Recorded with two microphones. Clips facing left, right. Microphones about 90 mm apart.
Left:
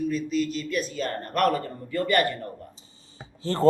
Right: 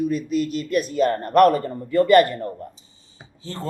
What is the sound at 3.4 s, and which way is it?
Speech, 40° left (ahead or behind).